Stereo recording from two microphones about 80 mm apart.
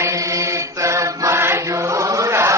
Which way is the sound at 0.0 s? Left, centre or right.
Right.